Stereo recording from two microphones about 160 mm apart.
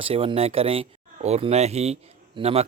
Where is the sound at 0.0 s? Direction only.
35° right (ahead or behind).